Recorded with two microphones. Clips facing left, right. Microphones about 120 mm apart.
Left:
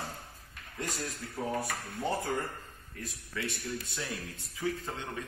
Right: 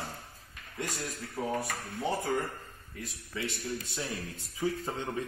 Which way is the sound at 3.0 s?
20° right (ahead or behind).